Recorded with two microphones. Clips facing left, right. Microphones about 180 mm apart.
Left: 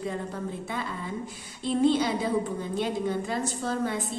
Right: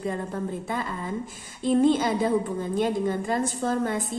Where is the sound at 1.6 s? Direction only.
50° right (ahead or behind).